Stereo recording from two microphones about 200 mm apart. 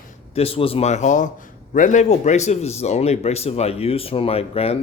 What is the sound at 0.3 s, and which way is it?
A man's voice, 30° left (ahead or behind).